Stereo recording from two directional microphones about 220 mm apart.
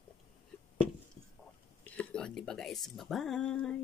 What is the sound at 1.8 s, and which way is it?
Speech, 5° left (ahead or behind).